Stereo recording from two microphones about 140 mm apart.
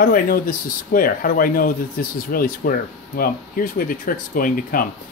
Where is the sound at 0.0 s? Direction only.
90° left.